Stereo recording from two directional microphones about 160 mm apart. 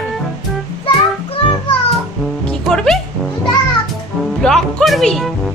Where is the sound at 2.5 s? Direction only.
5° left (ahead or behind).